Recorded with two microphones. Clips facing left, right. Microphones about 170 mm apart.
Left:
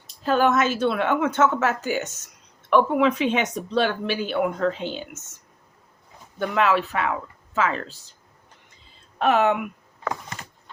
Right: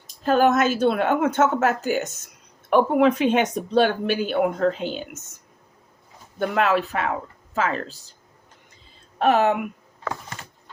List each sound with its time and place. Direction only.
0.3 s speech: 45° right (ahead or behind)
6.4 s speech: 45° right (ahead or behind)
9.1 s speech: 40° right (ahead or behind)